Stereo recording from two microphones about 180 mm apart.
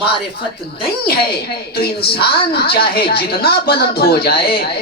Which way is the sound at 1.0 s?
60° left (ahead or behind).